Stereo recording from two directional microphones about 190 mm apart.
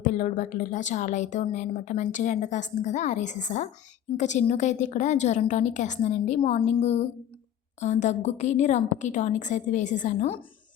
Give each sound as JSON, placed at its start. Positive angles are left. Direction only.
{"t": 0.0, "sound": "a woman's voice", "side_deg": 40}